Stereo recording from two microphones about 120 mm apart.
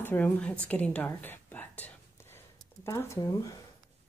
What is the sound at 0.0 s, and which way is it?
A woman's voice, 15° left (ahead or behind).